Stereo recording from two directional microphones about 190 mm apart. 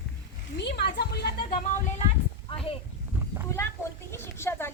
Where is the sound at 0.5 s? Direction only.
60° left (ahead or behind).